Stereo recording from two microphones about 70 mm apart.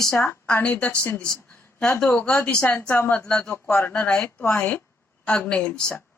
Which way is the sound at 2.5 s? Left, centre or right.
Centre.